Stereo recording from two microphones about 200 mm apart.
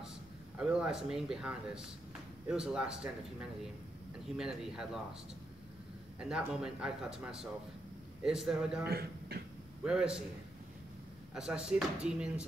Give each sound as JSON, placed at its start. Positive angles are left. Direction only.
{"t": 0.6, "sound": "speech", "side_deg": -5}
{"t": 6.1, "sound": "speech", "side_deg": -5}
{"t": 8.8, "sound": "a man's voice", "side_deg": -50}
{"t": 9.8, "sound": "speech", "side_deg": -5}
{"t": 11.3, "sound": "speech", "side_deg": -5}